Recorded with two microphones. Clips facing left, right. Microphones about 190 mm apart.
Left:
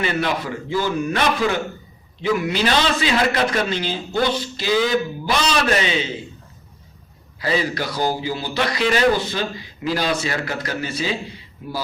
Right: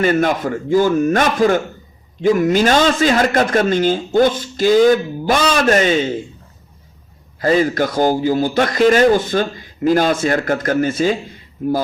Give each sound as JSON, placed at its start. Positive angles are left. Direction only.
{"t": 0.0, "sound": "a man's voice", "side_deg": -45}
{"t": 7.3, "sound": "a man's voice", "side_deg": -50}